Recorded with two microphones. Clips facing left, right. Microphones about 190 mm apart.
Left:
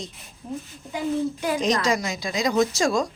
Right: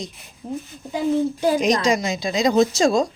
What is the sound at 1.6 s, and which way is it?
A woman's voice, 15° right (ahead or behind).